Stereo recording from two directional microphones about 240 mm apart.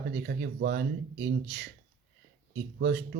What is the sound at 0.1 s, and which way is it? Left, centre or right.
Speech, right.